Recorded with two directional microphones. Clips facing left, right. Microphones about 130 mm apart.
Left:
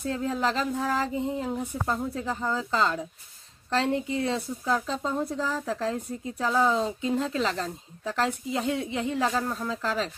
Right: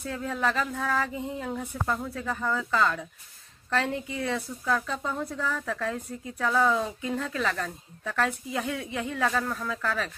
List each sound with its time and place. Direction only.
0.0 s speech: 25° left (ahead or behind)